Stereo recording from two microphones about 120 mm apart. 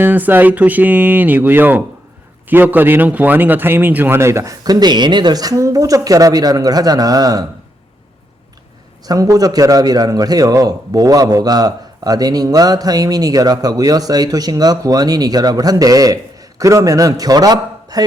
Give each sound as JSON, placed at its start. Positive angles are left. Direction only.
{"t": 0.0, "sound": "a man's voice", "side_deg": -15}
{"t": 9.0, "sound": "a man's voice", "side_deg": -30}